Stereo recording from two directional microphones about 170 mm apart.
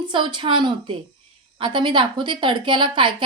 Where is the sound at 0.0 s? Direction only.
25° right (ahead or behind).